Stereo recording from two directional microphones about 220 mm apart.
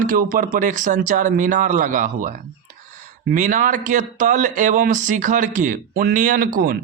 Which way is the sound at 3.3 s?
35° right (ahead or behind).